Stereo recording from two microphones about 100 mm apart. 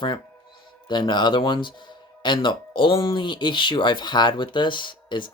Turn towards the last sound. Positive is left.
turn(degrees=55)  # may be behind; listen again after turning